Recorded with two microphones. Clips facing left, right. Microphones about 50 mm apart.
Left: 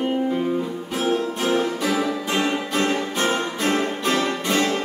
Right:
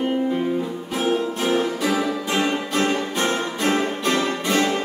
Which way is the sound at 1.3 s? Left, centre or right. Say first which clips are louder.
Even; centre.